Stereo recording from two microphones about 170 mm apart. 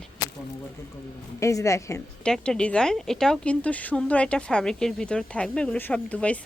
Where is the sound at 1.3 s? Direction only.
15° left (ahead or behind).